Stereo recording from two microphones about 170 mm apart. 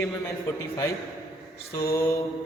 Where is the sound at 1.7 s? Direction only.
20° left (ahead or behind).